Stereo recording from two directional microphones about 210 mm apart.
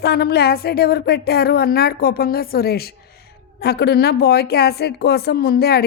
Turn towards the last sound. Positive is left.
turn(degrees=50)  # may be behind; listen again after turning